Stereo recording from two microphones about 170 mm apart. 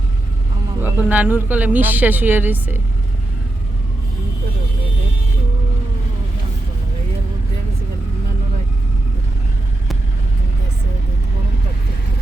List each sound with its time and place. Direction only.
0.8 s speech: 10° right (ahead or behind)